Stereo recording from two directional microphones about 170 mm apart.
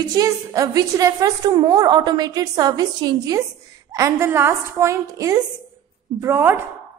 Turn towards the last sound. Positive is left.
turn(degrees=-15)  # may be behind; listen again after turning